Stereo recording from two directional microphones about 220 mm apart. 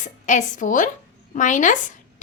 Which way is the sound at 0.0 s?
35° left (ahead or behind).